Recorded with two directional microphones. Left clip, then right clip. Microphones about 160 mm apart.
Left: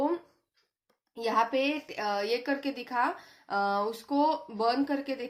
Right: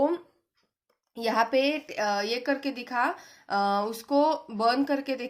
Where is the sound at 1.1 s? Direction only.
40° right (ahead or behind).